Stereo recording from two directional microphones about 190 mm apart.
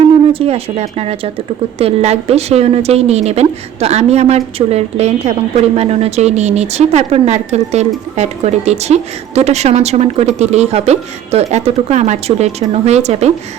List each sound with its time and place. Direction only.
0.3 s a woman's voice: 30° right (ahead or behind)